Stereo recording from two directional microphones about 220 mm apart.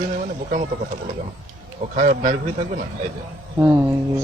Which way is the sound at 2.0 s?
35° right (ahead or behind).